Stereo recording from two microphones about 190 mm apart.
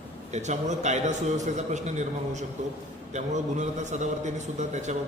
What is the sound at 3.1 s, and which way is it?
A man's voice, 40° right (ahead or behind).